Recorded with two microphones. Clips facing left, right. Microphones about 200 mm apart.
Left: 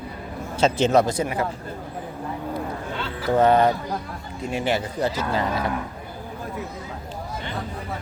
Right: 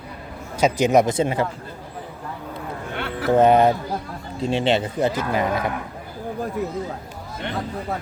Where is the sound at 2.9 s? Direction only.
60° right (ahead or behind).